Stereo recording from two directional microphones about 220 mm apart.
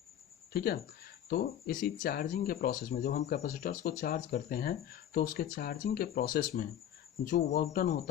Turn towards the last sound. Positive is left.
turn(degrees=40)  # may be behind; listen again after turning